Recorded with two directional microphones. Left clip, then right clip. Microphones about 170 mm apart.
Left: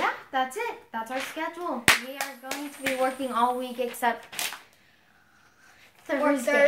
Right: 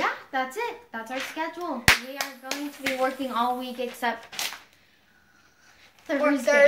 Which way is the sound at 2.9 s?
15° left (ahead or behind).